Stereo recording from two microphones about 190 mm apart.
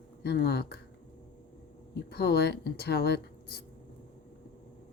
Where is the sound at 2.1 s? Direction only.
55° left (ahead or behind).